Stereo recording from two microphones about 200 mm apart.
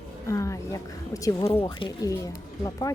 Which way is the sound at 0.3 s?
15° left (ahead or behind).